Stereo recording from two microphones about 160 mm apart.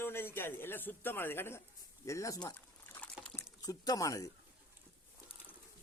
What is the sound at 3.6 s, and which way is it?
Speech, 25° left (ahead or behind).